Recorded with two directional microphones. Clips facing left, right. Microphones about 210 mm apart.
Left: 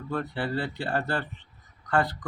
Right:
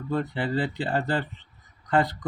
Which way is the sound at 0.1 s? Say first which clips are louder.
Right 3 dB; 20° right (ahead or behind).